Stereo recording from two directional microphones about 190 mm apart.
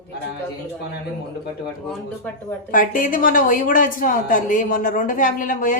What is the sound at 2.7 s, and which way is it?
A woman's voice, 45° left (ahead or behind).